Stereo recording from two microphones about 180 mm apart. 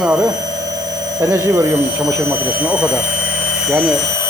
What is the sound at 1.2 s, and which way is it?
Speech, 15° right (ahead or behind).